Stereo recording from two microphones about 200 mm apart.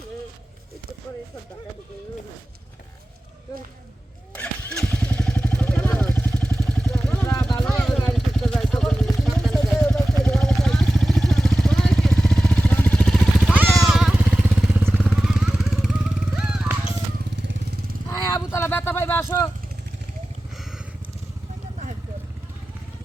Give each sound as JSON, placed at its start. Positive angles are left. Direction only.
{"t": 4.4, "sound": "motorcycle", "side_deg": 5}
{"t": 6.7, "sound": "vehicle", "side_deg": 0}
{"t": 17.3, "sound": "vehicle", "side_deg": -65}
{"t": 18.1, "sound": "a sound", "side_deg": 15}